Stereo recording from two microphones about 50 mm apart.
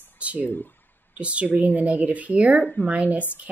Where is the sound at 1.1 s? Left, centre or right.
Right.